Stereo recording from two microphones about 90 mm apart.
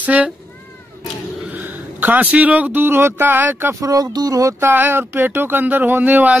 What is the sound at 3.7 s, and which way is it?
Speech, 40° right (ahead or behind).